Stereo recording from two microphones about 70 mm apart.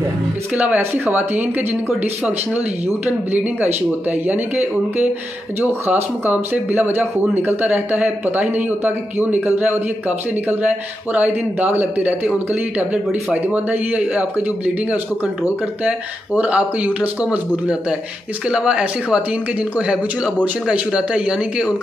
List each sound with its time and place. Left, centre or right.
0.7 s a man's voice: right
4.1 s a man's voice: right
16.3 s a man's voice: centre
20.6 s speech: centre